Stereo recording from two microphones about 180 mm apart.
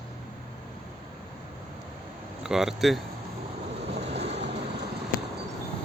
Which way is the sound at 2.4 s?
5° right (ahead or behind).